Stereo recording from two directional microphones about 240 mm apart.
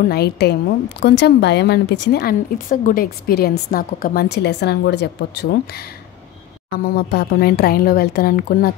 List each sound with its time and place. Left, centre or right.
0.0 s a woman's voice: left
6.7 s speech: left